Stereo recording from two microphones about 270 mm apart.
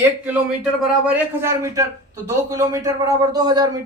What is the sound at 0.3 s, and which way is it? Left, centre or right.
Speech, centre.